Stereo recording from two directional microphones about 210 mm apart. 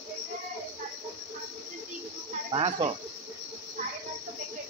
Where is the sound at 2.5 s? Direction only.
30° right (ahead or behind).